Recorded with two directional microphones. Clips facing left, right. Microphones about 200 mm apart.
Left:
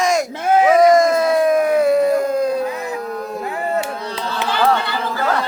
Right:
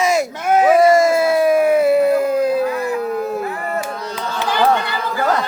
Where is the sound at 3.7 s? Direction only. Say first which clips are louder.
Left 2 dB; 30° left (ahead or behind).